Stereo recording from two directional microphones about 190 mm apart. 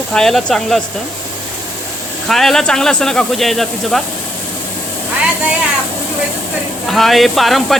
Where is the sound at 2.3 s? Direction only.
Centre (ahead or behind).